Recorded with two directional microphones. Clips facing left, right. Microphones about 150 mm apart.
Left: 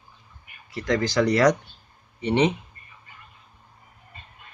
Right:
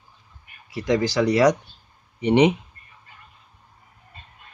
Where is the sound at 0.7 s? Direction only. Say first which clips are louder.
Right 3 dB; 10° right (ahead or behind).